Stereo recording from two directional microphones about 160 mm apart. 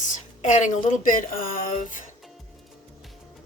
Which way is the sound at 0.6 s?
55° left (ahead or behind).